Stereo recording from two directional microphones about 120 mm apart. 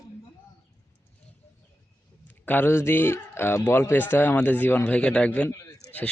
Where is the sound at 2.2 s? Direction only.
15° left (ahead or behind).